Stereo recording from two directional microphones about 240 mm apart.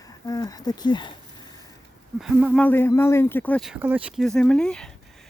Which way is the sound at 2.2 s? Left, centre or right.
Centre.